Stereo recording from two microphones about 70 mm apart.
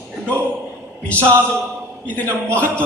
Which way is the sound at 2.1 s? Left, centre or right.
Left.